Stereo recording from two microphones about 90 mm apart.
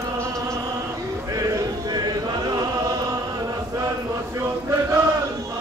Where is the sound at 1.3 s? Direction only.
40° right (ahead or behind).